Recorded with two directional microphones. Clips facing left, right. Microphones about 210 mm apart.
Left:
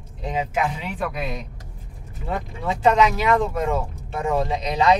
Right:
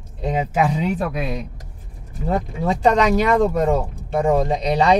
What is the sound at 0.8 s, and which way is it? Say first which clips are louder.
Speech: right 6 dB; 40° right (ahead or behind).